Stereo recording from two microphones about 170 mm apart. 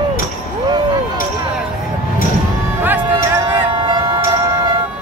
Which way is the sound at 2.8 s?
10° right (ahead or behind).